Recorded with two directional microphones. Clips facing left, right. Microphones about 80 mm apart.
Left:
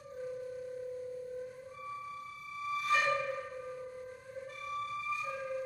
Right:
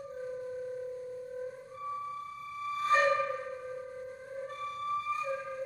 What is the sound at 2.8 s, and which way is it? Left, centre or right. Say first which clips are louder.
Music: right 5 dB; right.